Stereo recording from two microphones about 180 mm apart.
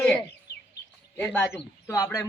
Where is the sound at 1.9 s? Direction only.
15° left (ahead or behind).